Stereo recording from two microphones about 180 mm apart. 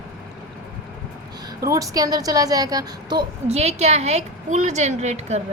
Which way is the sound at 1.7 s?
20° right (ahead or behind).